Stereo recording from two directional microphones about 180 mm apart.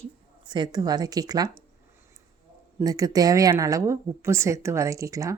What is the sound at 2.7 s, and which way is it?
Speech, 20° right (ahead or behind).